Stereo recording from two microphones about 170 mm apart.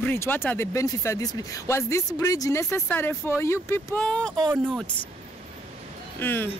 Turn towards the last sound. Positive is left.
turn(degrees=10)  # may be behind; listen again after turning